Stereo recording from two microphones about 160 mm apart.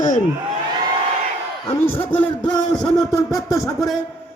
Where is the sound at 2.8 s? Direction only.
25° left (ahead or behind).